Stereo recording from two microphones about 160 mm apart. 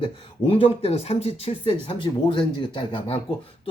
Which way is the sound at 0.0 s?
35° left (ahead or behind).